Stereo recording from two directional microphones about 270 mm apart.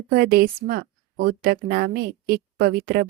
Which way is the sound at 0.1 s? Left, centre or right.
Right.